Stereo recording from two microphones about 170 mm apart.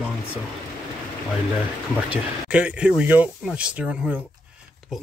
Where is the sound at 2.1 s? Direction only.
5° right (ahead or behind).